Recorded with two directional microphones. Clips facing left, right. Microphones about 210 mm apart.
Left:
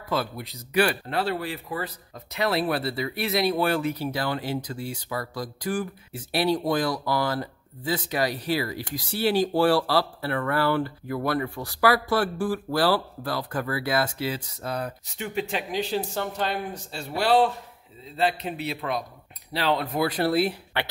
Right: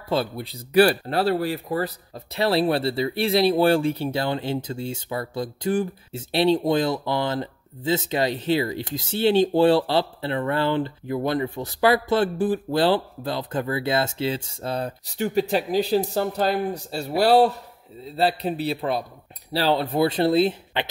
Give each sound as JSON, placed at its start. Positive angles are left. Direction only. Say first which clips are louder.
{"t": 0.1, "sound": "a man's voice", "louder": "right 4 dB", "side_deg": -30}